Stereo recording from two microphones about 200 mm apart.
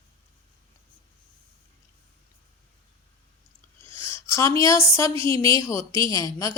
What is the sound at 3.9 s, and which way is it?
A woman's voice, 15° left (ahead or behind).